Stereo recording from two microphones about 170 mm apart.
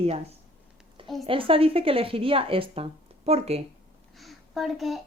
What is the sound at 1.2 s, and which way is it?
Speech, 30° right (ahead or behind).